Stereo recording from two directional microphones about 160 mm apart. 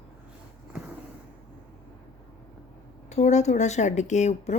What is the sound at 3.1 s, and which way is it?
A woman's voice, 45° left (ahead or behind).